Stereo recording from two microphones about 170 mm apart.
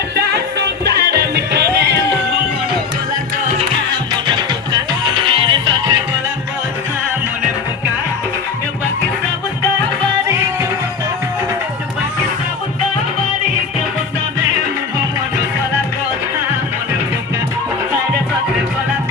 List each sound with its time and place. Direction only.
0.9 s music: 65° right (ahead or behind)
4.3 s music: 25° right (ahead or behind)